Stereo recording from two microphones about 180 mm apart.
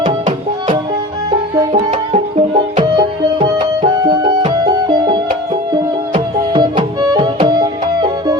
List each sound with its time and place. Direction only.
0.0 s music: 25° right (ahead or behind)